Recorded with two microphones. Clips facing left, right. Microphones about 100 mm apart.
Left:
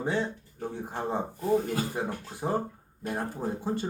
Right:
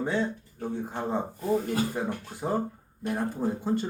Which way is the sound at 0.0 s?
15° left (ahead or behind).